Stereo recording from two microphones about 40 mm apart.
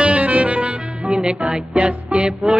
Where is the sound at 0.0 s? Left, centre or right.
Right.